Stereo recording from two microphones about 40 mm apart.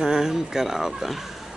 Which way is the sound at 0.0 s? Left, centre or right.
Centre.